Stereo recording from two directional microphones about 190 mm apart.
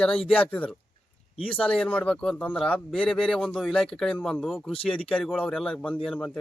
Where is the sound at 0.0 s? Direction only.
5° left (ahead or behind).